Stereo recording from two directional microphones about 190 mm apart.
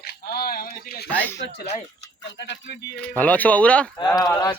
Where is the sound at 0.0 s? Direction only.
55° left (ahead or behind).